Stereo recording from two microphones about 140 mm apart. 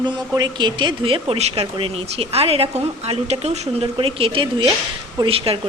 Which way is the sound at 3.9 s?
40° right (ahead or behind).